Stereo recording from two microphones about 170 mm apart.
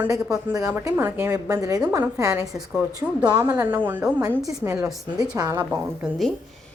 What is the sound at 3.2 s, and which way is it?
A woman's voice, 15° right (ahead or behind).